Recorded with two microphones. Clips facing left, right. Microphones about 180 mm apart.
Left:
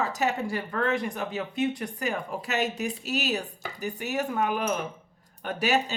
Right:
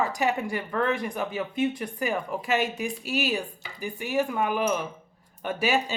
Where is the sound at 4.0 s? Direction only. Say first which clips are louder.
Right 2 dB; 45° left (ahead or behind).